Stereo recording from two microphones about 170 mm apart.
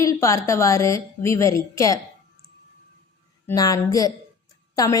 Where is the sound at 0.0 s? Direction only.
15° left (ahead or behind).